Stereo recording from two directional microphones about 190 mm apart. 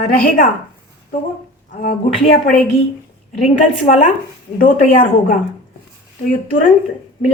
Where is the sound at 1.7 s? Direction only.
45° left (ahead or behind).